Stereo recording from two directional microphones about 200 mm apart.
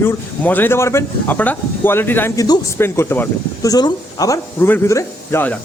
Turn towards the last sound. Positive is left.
turn(degrees=10)  # may be behind; listen again after turning